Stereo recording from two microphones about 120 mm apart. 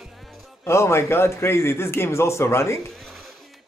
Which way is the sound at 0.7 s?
25° left (ahead or behind).